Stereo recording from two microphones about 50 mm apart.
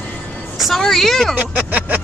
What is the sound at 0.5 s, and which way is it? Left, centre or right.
Speech, centre.